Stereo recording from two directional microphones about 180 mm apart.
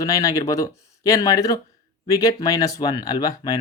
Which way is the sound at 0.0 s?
20° left (ahead or behind).